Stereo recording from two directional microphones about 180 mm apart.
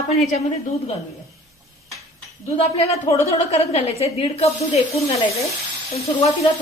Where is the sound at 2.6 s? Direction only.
35° left (ahead or behind).